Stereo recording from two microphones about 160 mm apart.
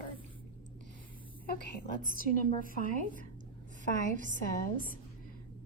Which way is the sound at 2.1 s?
55° left (ahead or behind).